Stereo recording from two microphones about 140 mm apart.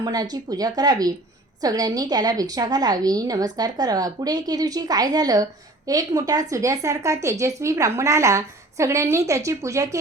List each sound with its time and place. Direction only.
0.0 s a woman's voice: 30° right (ahead or behind)